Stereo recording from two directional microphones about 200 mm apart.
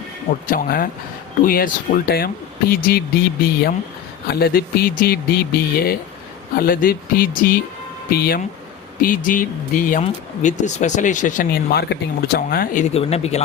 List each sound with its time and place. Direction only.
0.4 s speech: 45° left (ahead or behind)
12.9 s speech: 30° left (ahead or behind)